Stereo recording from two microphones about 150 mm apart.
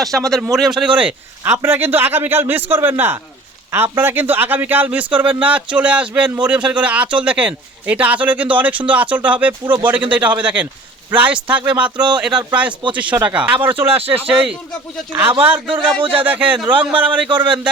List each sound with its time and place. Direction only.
0.0 s speech: centre (ahead or behind)
0.9 s speech: 15° right (ahead or behind)
13.8 s speech: 40° right (ahead or behind)
14.3 s speech: 5° right (ahead or behind)
15.4 s speech: 15° right (ahead or behind)
15.6 s speech: 35° right (ahead or behind)
16.1 s speech: 10° right (ahead or behind)